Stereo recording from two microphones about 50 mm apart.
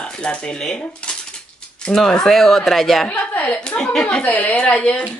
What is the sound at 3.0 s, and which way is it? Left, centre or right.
Speech, left.